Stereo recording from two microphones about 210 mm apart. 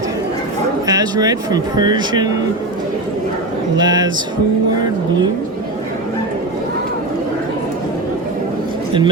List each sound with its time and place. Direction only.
0.9 s speech: 20° right (ahead or behind)
3.8 s speech: 20° right (ahead or behind)